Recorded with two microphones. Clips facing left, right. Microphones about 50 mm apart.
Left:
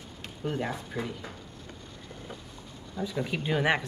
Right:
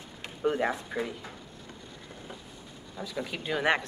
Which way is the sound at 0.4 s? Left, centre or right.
Right.